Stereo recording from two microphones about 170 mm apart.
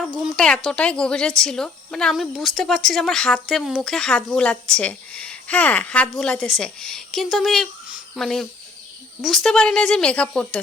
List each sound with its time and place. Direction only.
0.2 s a woman's voice: centre (ahead or behind)